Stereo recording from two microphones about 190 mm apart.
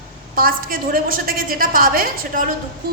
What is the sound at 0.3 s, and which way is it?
A woman's voice, 50° right (ahead or behind).